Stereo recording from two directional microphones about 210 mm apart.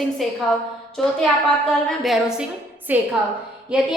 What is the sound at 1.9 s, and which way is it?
A woman's voice, centre (ahead or behind).